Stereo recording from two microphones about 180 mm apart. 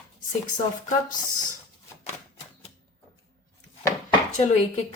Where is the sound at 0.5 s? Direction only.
45° left (ahead or behind).